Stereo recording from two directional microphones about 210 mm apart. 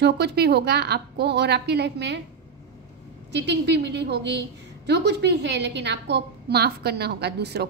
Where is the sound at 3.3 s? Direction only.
55° right (ahead or behind).